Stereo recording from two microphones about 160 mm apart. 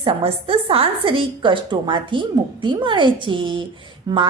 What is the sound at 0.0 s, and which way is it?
A woman's voice, 35° right (ahead or behind).